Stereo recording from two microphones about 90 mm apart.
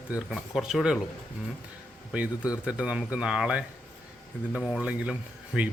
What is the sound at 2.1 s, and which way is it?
Speech, 15° right (ahead or behind).